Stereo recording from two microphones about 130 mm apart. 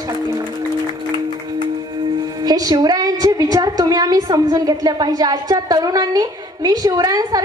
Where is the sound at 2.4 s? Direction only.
30° right (ahead or behind).